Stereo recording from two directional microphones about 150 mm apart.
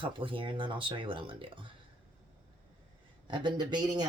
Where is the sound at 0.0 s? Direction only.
35° right (ahead or behind).